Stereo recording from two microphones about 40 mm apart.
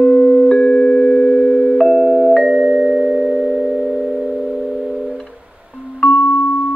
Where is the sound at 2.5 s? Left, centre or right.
Right.